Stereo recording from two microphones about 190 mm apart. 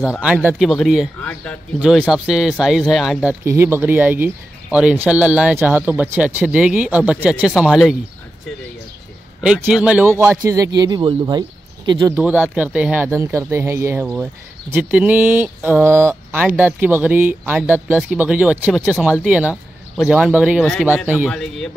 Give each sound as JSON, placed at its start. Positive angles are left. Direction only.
{"t": 0.2, "sound": "speech", "side_deg": -10}
{"t": 1.8, "sound": "speech", "side_deg": -5}
{"t": 9.4, "sound": "speech", "side_deg": -5}
{"t": 12.2, "sound": "speech", "side_deg": -10}